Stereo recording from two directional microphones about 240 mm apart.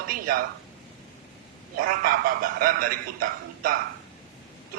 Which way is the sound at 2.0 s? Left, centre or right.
Right.